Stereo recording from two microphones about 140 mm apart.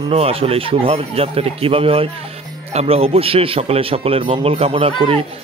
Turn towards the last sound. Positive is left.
turn(degrees=-40)  # may be behind; listen again after turning